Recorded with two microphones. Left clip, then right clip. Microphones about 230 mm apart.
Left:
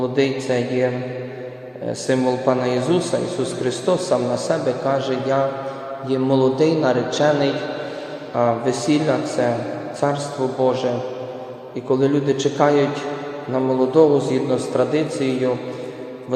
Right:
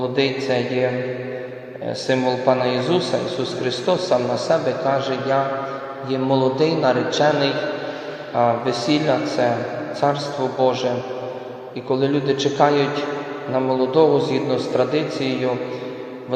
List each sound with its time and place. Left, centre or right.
0.0 s a man's voice: centre
1.9 s a man's voice: centre
11.9 s a man's voice: centre